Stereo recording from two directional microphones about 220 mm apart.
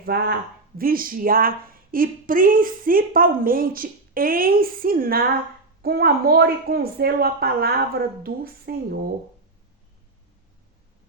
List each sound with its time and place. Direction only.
0.0 s a woman's voice: 45° right (ahead or behind)